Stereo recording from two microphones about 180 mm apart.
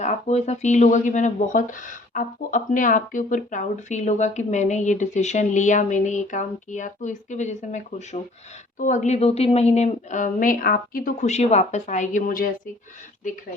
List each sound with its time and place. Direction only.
0.0 s a woman's voice: 40° left (ahead or behind)